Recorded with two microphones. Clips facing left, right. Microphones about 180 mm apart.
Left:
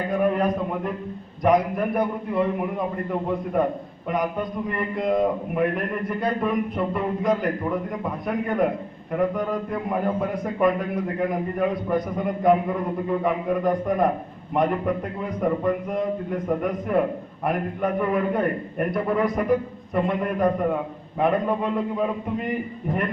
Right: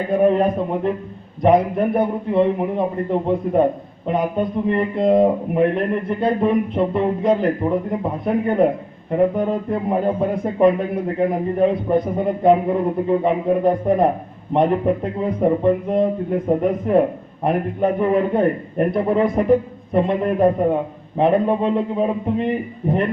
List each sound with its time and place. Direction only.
0.1 s a man's voice: 25° right (ahead or behind)